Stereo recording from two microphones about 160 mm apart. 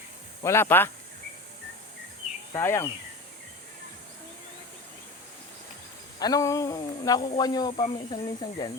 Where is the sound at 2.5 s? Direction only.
15° left (ahead or behind).